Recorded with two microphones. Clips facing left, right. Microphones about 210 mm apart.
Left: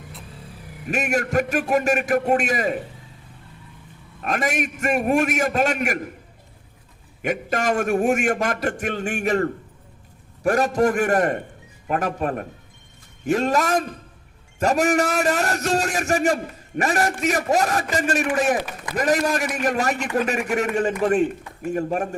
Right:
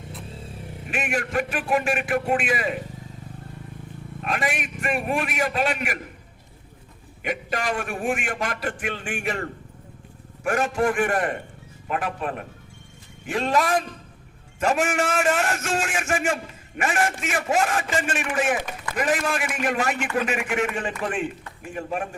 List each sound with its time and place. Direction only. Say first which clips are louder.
0.2 s vehicle: right 3 dB; 25° right (ahead or behind)
0.9 s a man's voice: left 5 dB; 40° left (ahead or behind)
4.2 s a man's voice: left 4 dB; 45° left (ahead or behind)
7.2 s a man's voice: left 4 dB; 45° left (ahead or behind)